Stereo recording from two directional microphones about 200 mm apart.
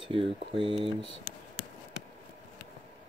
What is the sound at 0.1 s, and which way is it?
Speech, 25° right (ahead or behind).